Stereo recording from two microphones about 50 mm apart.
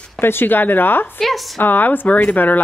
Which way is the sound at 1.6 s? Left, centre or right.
Left.